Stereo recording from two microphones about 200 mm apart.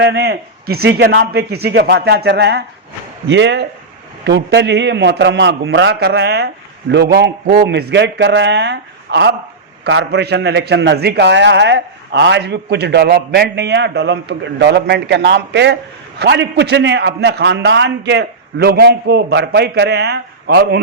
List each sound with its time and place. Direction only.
0.0 s a man's voice: 55° right (ahead or behind)